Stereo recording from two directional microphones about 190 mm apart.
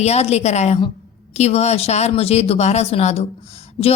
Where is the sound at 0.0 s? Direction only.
35° left (ahead or behind).